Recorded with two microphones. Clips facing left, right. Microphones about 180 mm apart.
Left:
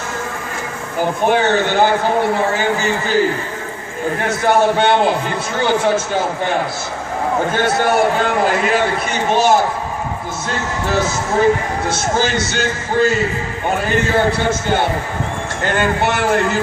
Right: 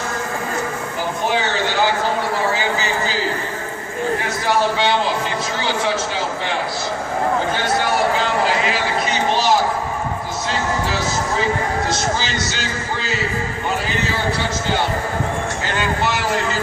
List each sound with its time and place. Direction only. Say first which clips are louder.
1.3 s a man's voice: left 7 dB; 55° left (ahead or behind)
7.5 s a man's voice: left 4 dB; 50° left (ahead or behind)